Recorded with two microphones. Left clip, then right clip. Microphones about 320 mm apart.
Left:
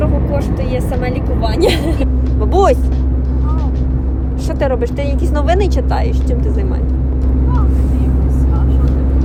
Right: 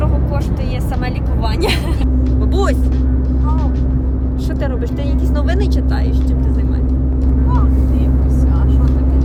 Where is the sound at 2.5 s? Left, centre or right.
Centre.